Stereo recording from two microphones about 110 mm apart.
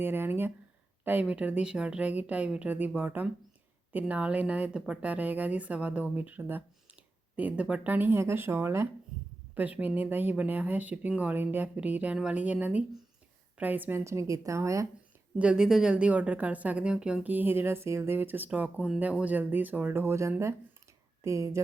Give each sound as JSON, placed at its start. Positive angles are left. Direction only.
{"t": 0.0, "sound": "a sound", "side_deg": -20}
{"t": 1.0, "sound": "a woman's voice", "side_deg": -15}
{"t": 14.0, "sound": "a woman's voice", "side_deg": -30}
{"t": 15.4, "sound": "a woman's voice", "side_deg": -10}